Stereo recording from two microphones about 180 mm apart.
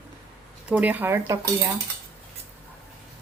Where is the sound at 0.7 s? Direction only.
10° right (ahead or behind).